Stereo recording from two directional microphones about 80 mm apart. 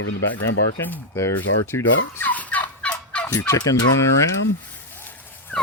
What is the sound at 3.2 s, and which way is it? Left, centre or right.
Fowl, left.